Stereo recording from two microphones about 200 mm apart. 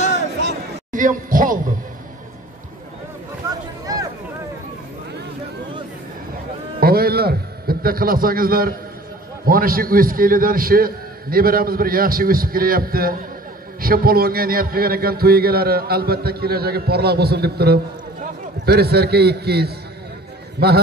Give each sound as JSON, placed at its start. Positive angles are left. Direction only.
{"t": 0.9, "sound": "a man's voice", "side_deg": -40}
{"t": 3.4, "sound": "a sound", "side_deg": -20}
{"t": 6.8, "sound": "a man's voice", "side_deg": -50}